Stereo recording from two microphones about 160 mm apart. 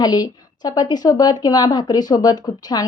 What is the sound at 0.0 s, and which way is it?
Speech, 25° left (ahead or behind).